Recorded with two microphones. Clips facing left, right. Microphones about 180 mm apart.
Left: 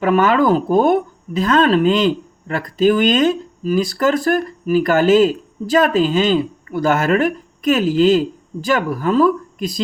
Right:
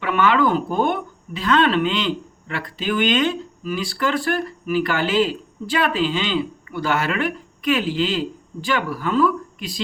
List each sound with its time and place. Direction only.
0.0 s speech: 45° left (ahead or behind)